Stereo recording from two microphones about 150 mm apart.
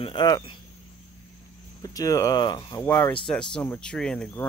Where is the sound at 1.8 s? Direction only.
25° left (ahead or behind).